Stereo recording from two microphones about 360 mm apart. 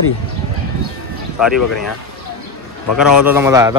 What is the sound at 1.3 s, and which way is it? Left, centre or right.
Speech, centre.